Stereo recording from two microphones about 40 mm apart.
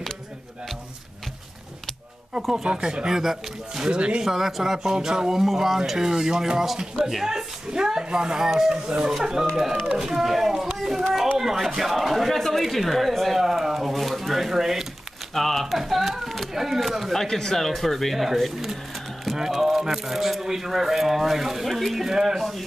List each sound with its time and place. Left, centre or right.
2.5 s speech: centre
3.9 s speech: right
4.2 s speech: centre
10.8 s a sound: centre
11.3 s speech: centre
13.4 s pigeon: centre
15.3 s a sound: centre
17.1 s speech: centre